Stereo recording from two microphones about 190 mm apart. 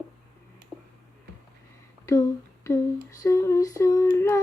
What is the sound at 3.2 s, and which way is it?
Female singing, 15° left (ahead or behind).